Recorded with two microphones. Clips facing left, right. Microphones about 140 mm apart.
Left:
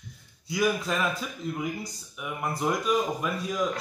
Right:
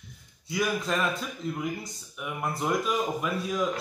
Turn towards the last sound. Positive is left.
turn(degrees=0)  # may be behind; listen again after turning